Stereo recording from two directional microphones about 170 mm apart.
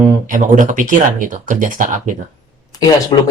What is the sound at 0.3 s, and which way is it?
Speech, 50° right (ahead or behind).